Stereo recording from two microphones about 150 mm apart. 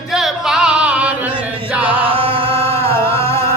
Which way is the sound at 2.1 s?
40° right (ahead or behind).